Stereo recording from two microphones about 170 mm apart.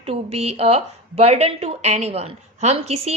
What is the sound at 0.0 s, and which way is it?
A woman's voice, 35° right (ahead or behind).